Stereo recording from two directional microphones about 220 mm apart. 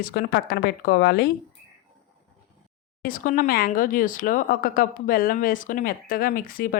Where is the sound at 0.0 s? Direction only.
45° left (ahead or behind).